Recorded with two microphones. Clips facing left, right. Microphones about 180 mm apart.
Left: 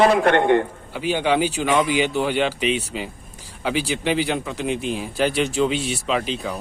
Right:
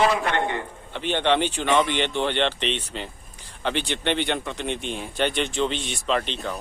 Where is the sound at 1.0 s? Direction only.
5° left (ahead or behind).